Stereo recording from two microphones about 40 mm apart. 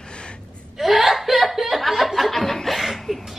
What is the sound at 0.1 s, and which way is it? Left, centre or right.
Gasp, left.